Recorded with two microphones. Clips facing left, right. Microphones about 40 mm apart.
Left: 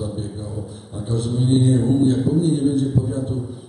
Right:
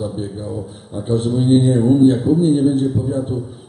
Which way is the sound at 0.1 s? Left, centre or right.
Right.